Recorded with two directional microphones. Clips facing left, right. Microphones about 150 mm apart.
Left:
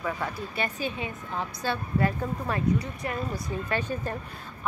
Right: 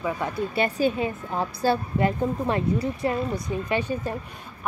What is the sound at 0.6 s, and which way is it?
A woman's voice, 35° right (ahead or behind).